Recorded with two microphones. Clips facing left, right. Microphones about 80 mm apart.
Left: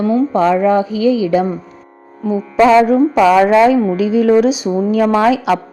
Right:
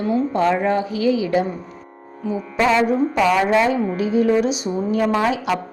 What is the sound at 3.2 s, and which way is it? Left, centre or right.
A woman's voice, left.